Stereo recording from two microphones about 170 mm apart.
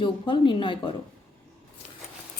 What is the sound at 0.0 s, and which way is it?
Speech, 30° left (ahead or behind).